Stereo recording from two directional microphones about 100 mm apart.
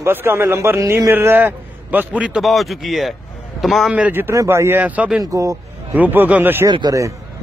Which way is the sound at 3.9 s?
15° right (ahead or behind).